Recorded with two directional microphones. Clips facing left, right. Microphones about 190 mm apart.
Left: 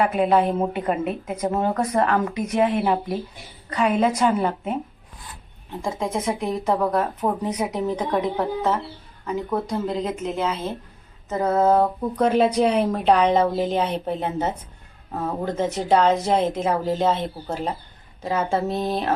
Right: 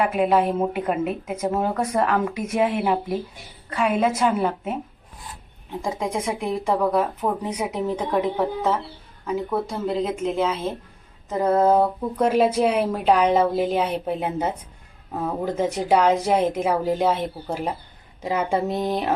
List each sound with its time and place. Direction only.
0.0 s a woman's voice: 5° right (ahead or behind)
5.8 s speech: 15° right (ahead or behind)
7.2 s a woman's voice: 5° left (ahead or behind); by 19.1 s 15° right (ahead or behind)